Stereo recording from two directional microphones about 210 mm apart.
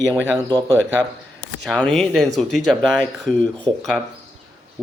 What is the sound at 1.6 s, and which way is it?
Speech, 5° left (ahead or behind).